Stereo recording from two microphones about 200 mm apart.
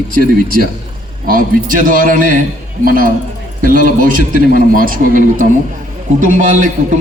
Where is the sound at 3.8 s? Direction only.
40° right (ahead or behind).